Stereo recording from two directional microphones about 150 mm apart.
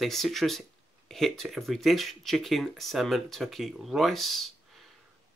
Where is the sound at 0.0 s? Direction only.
Centre (ahead or behind).